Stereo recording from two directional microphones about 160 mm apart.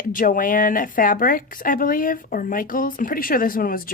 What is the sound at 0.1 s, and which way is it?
A woman's voice, 55° left (ahead or behind).